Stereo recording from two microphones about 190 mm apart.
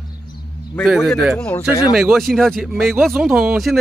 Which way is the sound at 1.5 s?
15° left (ahead or behind).